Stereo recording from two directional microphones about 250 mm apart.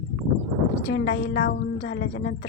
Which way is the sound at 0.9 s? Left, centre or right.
Left.